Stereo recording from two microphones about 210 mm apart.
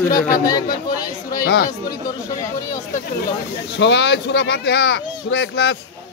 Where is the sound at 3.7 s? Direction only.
55° left (ahead or behind).